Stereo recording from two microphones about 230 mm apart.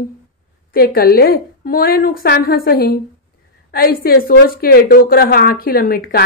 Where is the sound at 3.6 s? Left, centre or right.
Left.